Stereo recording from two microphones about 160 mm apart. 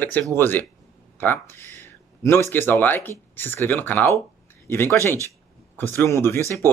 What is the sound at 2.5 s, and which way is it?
Speech, 10° left (ahead or behind).